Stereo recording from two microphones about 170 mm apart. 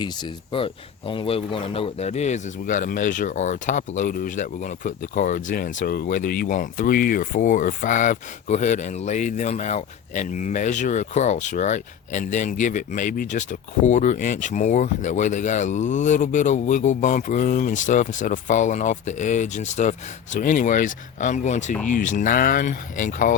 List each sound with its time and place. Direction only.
0.0 s speech: 30° left (ahead or behind); by 23.4 s 50° left (ahead or behind)